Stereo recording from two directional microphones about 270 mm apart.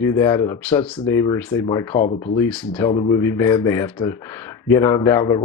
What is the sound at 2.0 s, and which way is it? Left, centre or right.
Speech, left.